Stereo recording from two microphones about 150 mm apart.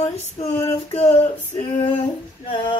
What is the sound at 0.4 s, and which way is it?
Female singing, 20° left (ahead or behind).